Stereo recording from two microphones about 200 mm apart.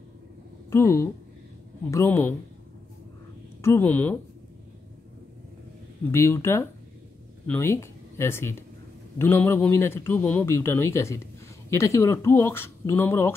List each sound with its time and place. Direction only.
0.7 s a man's voice: 15° left (ahead or behind)
3.6 s a man's voice: 10° left (ahead or behind)
6.1 s a man's voice: 15° left (ahead or behind)